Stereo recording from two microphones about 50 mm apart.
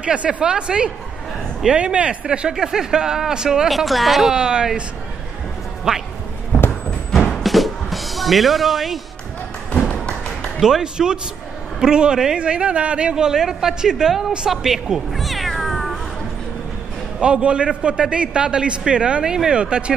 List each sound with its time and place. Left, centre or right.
0.0 s a man's voice: right; by 4.3 s centre
4.3 s speech: centre
7.1 s music: centre
9.7 s tap: centre
10.6 s speech: centre
14.5 s cat: centre
17.2 s a man's voice: right